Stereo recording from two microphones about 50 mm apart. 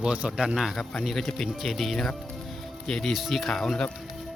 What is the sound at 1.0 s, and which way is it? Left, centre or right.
Speech, centre.